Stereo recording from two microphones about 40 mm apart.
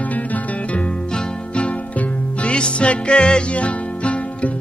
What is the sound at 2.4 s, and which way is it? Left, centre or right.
Music, left.